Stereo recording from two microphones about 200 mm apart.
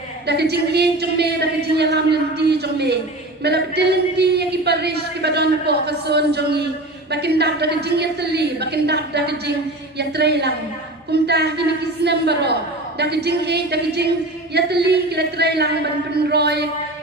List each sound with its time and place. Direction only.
0.3 s speech: 55° right (ahead or behind)